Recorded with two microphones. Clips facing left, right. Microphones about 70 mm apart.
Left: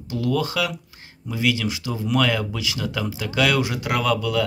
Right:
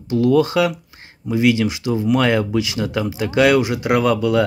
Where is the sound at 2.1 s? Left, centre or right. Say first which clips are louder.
Right 2 dB; right.